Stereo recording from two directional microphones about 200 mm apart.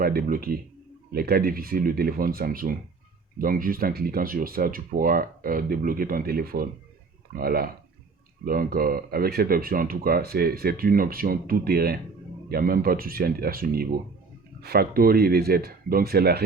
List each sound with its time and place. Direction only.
0.0 s speech: 45° right (ahead or behind)